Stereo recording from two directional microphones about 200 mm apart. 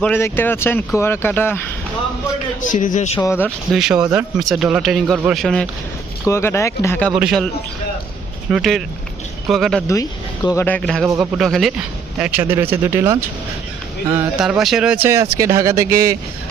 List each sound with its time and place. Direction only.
0.0 s speech: 10° left (ahead or behind)
2.6 s a man's voice: 40° left (ahead or behind)
3.2 s speech: 10° left (ahead or behind)
3.7 s speech: centre (ahead or behind)
6.2 s speech: 15° left (ahead or behind)
7.2 s speech: 5° right (ahead or behind)
8.4 s speech: centre (ahead or behind)
9.8 s speech: 15° left (ahead or behind)
11.1 s speech: 15° right (ahead or behind)
11.3 s speech: centre (ahead or behind)